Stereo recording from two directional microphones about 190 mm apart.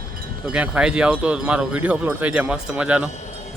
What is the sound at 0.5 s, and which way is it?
A man's voice, 5° right (ahead or behind).